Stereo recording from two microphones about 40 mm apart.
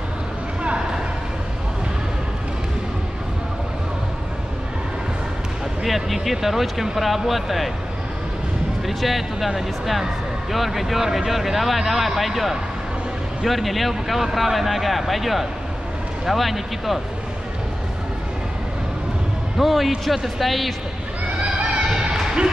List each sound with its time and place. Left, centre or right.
0.7 s a sound: right
5.9 s speech: centre
8.8 s speech: centre
10.5 s speech: centre
19.5 s speech: centre
21.5 s crowd: right
22.1 s a sound: centre